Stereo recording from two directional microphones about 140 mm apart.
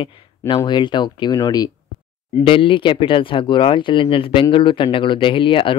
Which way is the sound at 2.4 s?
40° left (ahead or behind).